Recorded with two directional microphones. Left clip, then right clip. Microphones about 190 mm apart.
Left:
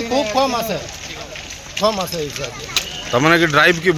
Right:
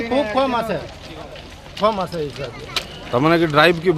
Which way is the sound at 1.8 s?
5° right (ahead or behind).